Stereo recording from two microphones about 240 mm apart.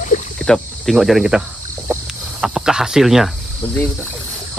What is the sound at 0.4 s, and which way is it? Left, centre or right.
Cricket, centre.